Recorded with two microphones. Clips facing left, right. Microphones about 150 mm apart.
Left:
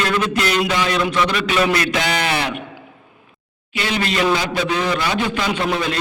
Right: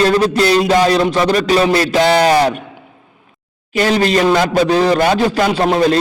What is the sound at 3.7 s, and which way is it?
A man's voice, 40° right (ahead or behind).